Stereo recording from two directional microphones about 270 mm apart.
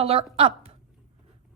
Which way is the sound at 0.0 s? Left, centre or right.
Right.